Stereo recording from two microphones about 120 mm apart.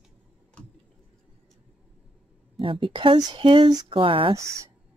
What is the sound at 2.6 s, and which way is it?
Speech, 45° right (ahead or behind).